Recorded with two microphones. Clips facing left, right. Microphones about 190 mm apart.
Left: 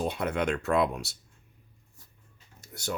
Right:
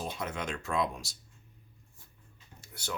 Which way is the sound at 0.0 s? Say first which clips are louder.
Left 8 dB; 60° left (ahead or behind).